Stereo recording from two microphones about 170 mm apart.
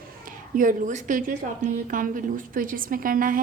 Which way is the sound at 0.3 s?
55° right (ahead or behind).